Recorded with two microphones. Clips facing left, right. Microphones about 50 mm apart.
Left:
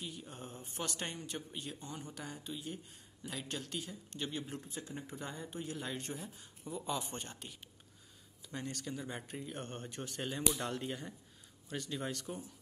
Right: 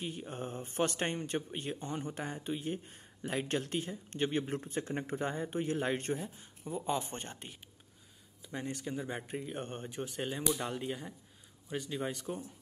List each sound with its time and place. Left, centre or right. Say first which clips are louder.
0.0 s speech: right 7 dB; right
8.5 s speech: right 3 dB; centre